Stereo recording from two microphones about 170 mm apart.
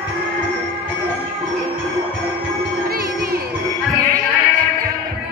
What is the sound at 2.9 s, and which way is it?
Music, 65° right (ahead or behind).